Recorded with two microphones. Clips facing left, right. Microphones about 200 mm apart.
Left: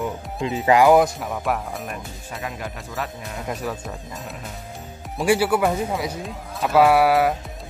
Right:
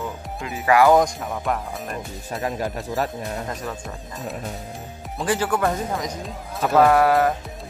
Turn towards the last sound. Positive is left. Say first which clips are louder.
# even
turn(degrees=10)  # may be behind; listen again after turning